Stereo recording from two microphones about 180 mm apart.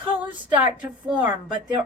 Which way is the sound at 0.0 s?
10° right (ahead or behind).